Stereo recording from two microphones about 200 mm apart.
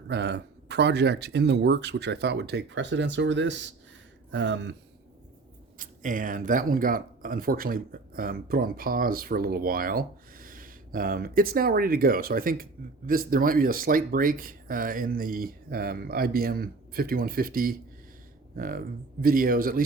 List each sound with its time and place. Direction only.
0.1 s speech: 55° right (ahead or behind)
5.8 s speech: 40° right (ahead or behind)